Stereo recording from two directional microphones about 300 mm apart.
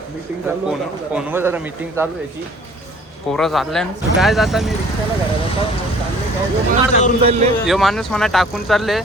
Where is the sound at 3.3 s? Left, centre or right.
Centre.